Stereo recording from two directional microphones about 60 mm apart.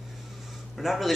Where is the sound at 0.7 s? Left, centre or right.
Centre.